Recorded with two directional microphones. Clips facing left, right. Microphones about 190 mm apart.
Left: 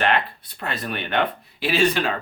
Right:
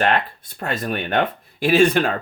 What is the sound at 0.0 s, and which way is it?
Speech, 45° right (ahead or behind).